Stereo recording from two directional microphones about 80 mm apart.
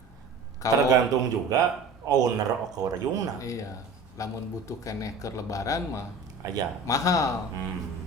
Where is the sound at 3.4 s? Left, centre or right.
Left.